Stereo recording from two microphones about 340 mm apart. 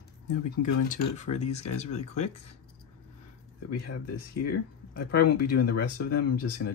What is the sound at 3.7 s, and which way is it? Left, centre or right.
Speech, left.